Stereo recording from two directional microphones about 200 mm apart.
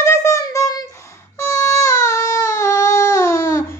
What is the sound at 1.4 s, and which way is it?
Baby cry, 15° left (ahead or behind).